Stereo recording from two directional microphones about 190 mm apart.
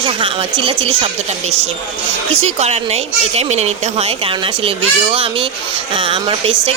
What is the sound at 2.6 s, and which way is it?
A woman's voice, 35° right (ahead or behind).